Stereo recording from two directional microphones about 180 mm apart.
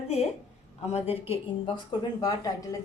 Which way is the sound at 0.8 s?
35° left (ahead or behind).